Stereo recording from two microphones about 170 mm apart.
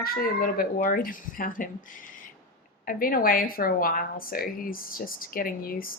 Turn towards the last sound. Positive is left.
turn(degrees=55)  # may be behind; listen again after turning